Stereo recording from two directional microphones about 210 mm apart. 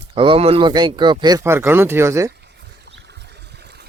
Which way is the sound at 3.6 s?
50° right (ahead or behind).